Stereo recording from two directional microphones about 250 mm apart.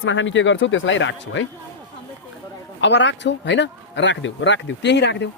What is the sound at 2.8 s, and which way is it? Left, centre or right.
Speech, left.